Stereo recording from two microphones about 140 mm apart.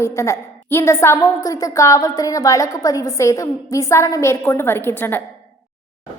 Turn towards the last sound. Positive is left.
turn(degrees=15)  # may be behind; listen again after turning